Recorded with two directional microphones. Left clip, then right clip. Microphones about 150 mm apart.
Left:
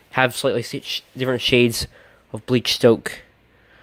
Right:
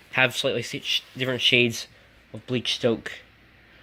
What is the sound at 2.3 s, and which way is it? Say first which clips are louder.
Speech: left 6 dB; 60° left (ahead or behind).